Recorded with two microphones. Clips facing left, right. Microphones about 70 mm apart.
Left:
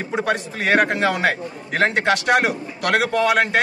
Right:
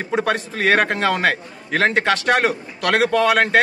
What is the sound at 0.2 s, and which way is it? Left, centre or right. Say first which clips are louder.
A man's voice: right 1 dB; right.